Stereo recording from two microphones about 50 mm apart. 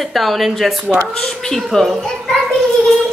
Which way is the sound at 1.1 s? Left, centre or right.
Centre.